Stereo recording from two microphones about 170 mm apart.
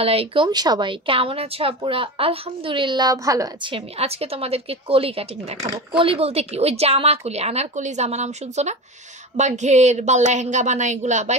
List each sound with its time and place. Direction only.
0.0 s speech: 35° right (ahead or behind)
3.7 s a woman's voice: 35° right (ahead or behind)